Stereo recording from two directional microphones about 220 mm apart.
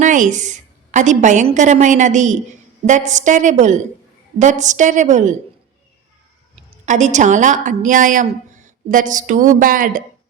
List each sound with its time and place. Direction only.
0.0 s a woman's voice: 35° right (ahead or behind)
6.6 s a woman's voice: 35° right (ahead or behind)